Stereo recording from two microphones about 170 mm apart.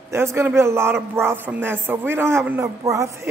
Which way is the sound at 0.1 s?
15° right (ahead or behind).